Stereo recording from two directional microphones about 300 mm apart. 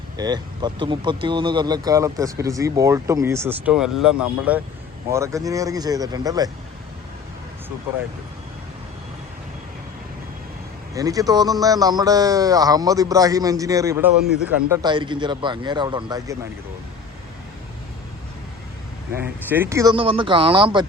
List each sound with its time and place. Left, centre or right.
0.2 s speech: centre
10.9 s speech: centre
19.1 s speech: centre